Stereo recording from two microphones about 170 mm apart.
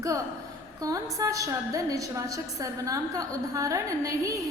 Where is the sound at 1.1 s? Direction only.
20° right (ahead or behind).